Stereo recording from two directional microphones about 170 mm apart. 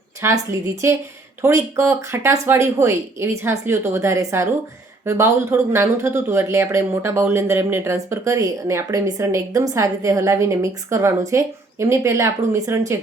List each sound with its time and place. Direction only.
0.2 s speech: 15° right (ahead or behind)